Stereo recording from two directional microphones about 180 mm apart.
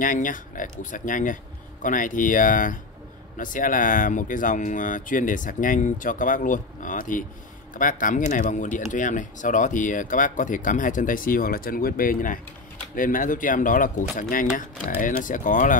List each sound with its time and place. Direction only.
0.0 s speech: 45° left (ahead or behind)